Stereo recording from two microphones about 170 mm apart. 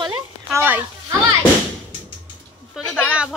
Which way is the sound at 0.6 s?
10° right (ahead or behind).